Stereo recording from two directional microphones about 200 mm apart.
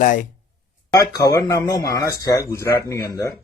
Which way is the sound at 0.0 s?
40° left (ahead or behind).